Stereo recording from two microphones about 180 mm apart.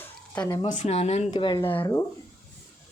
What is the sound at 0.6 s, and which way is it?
Speech, 35° left (ahead or behind).